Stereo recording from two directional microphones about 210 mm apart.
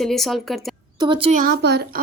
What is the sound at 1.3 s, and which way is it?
Speech, 45° right (ahead or behind).